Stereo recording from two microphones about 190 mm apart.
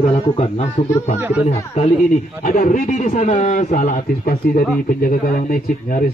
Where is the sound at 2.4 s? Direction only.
45° left (ahead or behind).